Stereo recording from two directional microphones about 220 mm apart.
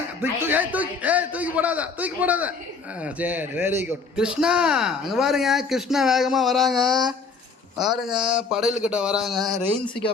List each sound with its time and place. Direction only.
0.2 s a man's voice: 5° right (ahead or behind)